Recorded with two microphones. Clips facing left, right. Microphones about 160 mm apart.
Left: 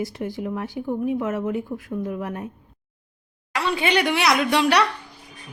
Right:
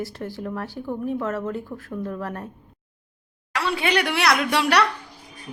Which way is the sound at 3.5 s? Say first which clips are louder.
Left 1 dB; centre (ahead or behind).